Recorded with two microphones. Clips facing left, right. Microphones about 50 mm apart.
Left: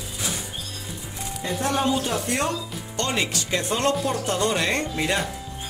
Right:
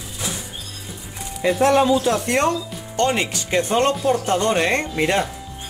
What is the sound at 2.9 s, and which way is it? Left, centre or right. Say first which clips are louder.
Speech: right 6 dB; right.